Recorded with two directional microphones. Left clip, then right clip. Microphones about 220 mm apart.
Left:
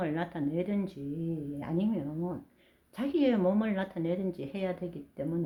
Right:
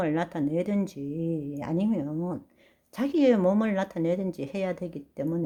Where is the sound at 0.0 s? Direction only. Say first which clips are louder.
Right 5 dB; 45° right (ahead or behind).